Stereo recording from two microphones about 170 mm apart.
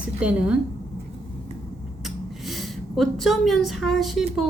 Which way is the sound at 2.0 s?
Centre (ahead or behind).